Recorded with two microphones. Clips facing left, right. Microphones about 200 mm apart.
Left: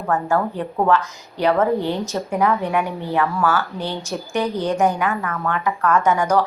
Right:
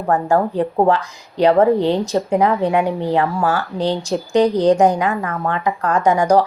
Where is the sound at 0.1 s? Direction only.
35° right (ahead or behind).